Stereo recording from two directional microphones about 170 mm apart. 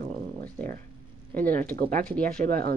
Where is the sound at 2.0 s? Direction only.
5° left (ahead or behind).